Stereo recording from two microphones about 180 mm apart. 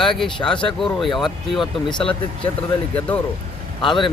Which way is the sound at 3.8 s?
25° left (ahead or behind).